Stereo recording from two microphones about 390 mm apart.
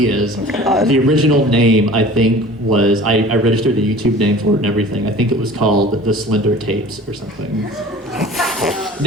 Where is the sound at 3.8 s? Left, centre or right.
Right.